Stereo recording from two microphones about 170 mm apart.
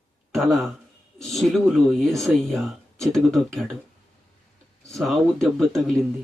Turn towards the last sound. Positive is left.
turn(degrees=0)  # may be behind; listen again after turning